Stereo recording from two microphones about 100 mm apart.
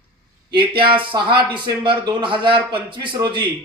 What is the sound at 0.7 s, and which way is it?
Speech, 55° right (ahead or behind).